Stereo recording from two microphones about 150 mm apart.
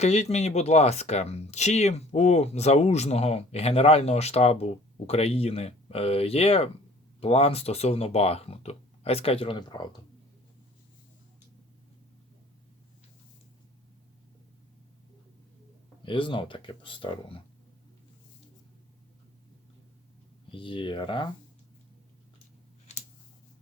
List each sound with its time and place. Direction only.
0.0 s speech: 45° left (ahead or behind); by 9.9 s 30° left (ahead or behind)
16.0 s speech: 35° left (ahead or behind)
20.5 s speech: 35° left (ahead or behind)